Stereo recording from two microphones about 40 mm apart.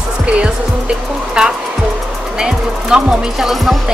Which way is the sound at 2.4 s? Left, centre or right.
Centre.